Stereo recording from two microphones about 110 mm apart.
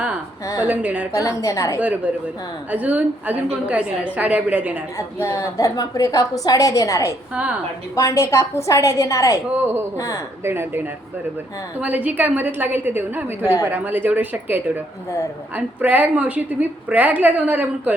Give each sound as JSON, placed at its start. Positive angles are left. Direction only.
{"t": 0.7, "sound": "a woman's voice", "side_deg": -15}
{"t": 1.1, "sound": "a woman's voice", "side_deg": 30}
{"t": 2.7, "sound": "a woman's voice", "side_deg": -15}
{"t": 4.9, "sound": "a woman's voice", "side_deg": 30}
{"t": 10.4, "sound": "a woman's voice", "side_deg": -20}